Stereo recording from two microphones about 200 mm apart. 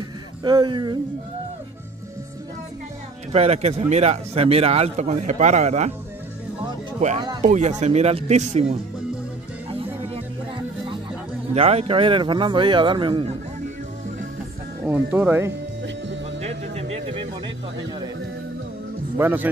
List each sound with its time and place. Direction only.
0.4 s a man's voice: 20° right (ahead or behind)
3.3 s speech: 35° right (ahead or behind)
7.0 s a man's voice: 30° right (ahead or behind)
9.7 s music: 30° right (ahead or behind)
11.5 s a man's voice: 30° right (ahead or behind)
14.9 s speech: 10° right (ahead or behind)
16.3 s music: 30° right (ahead or behind)
19.1 s speech: 10° right (ahead or behind)